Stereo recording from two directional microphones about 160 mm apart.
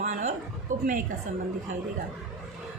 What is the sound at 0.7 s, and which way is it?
Speech, 55° right (ahead or behind).